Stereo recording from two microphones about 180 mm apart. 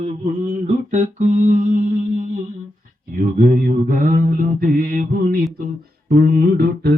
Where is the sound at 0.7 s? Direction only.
40° right (ahead or behind).